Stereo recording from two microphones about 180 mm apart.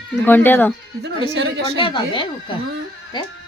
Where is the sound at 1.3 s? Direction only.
70° right (ahead or behind).